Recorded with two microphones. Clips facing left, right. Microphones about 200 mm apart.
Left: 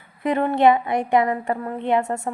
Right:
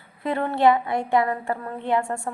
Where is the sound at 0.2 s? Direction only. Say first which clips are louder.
Left 3 dB; 15° left (ahead or behind).